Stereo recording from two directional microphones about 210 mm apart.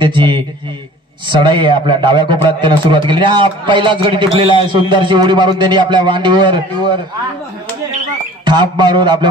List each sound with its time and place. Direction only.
0.0 s a man's voice: 20° right (ahead or behind)
8.5 s a man's voice: 20° right (ahead or behind)